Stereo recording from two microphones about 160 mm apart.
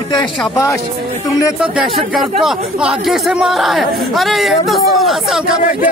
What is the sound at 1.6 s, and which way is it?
Speech, centre (ahead or behind).